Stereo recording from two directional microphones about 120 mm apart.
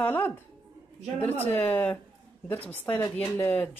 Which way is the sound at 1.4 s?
15° left (ahead or behind).